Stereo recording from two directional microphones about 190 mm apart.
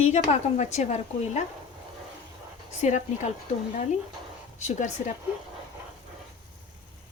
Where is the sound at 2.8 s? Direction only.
40° left (ahead or behind).